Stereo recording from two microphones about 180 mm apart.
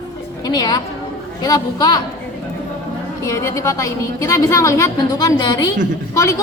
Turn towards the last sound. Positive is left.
turn(degrees=15)  # may be behind; listen again after turning